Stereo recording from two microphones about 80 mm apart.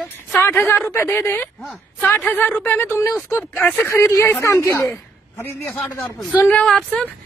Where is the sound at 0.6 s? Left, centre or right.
Left.